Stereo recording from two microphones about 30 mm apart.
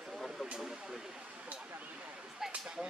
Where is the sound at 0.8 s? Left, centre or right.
Centre.